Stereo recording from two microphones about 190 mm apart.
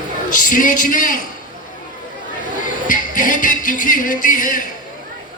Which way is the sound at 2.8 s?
45° left (ahead or behind).